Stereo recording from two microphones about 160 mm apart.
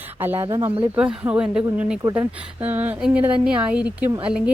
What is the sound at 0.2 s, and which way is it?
Speech, 15° right (ahead or behind).